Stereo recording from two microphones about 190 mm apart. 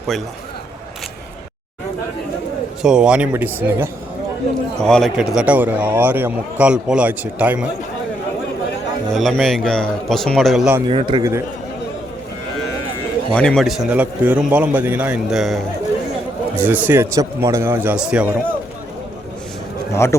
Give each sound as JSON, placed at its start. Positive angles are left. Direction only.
{"t": 2.8, "sound": "speech", "side_deg": -5}
{"t": 4.8, "sound": "a man's voice", "side_deg": 5}
{"t": 9.1, "sound": "speech", "side_deg": 0}
{"t": 10.8, "sound": "speech", "side_deg": -25}
{"t": 13.3, "sound": "a man's voice", "side_deg": 5}
{"t": 19.9, "sound": "a man's voice", "side_deg": 15}